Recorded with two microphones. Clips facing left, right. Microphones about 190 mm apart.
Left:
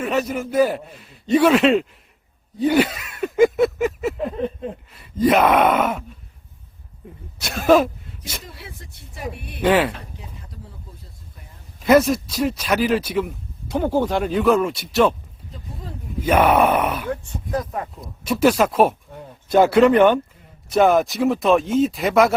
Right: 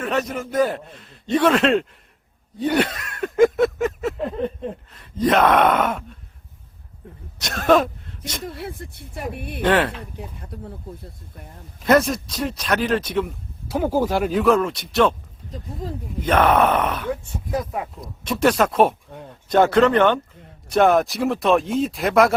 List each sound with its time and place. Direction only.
0.0 s speech: 5° left (ahead or behind)
2.6 s a sound: 5° left (ahead or behind)
7.3 s speech: 5° left (ahead or behind)
8.4 s speech: 55° right (ahead or behind)
9.6 s speech: 5° left (ahead or behind)
10.0 s speech: 55° right (ahead or behind)
11.8 s speech: 5° left (ahead or behind)
13.7 s speech: 5° right (ahead or behind)
16.2 s speech: 10° left (ahead or behind)
17.1 s speech: 10° right (ahead or behind)
18.0 s speech: 5° left (ahead or behind)